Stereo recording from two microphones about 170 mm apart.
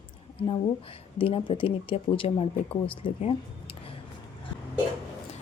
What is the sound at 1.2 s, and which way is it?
Speech, 30° left (ahead or behind).